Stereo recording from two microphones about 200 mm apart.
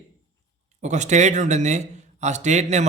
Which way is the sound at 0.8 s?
35° right (ahead or behind).